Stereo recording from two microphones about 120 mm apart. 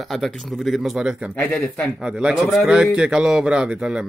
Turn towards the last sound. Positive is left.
turn(degrees=-5)  # may be behind; listen again after turning